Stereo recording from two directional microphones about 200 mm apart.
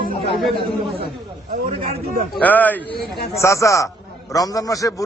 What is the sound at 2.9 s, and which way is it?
Speech, 50° left (ahead or behind).